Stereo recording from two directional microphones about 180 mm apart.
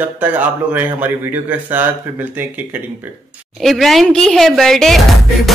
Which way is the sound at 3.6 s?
Centre (ahead or behind).